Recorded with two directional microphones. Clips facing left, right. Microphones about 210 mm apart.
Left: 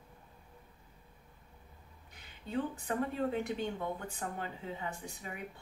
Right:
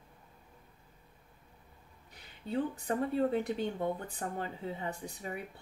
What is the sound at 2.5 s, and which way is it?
Speech, 35° right (ahead or behind).